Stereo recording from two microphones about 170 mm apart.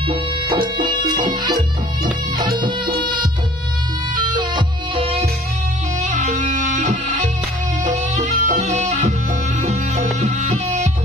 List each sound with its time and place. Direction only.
0.1 s music: 30° right (ahead or behind)
4.2 s music: 30° right (ahead or behind)
5.9 s music: 45° right (ahead or behind)